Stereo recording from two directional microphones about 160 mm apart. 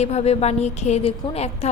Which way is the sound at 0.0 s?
40° left (ahead or behind).